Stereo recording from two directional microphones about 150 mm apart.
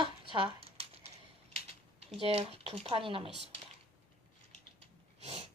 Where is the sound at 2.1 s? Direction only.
40° right (ahead or behind).